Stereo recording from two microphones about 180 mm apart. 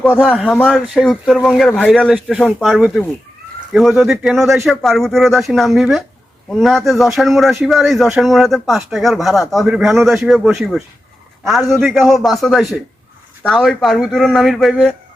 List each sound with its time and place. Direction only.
0.0 s a man's voice: 5° left (ahead or behind)